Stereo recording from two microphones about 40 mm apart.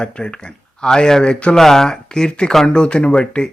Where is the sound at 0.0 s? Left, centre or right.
Left.